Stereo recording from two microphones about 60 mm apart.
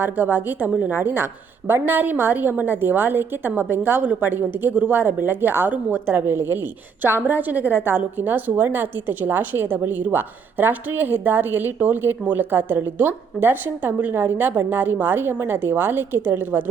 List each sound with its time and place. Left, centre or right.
0.0 s a woman's voice: right